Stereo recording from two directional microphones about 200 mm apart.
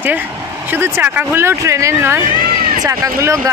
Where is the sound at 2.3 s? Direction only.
45° right (ahead or behind).